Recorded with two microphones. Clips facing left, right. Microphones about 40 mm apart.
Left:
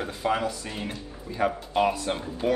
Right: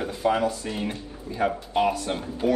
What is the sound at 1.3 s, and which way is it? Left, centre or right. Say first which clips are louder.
Speech: right 1 dB; left.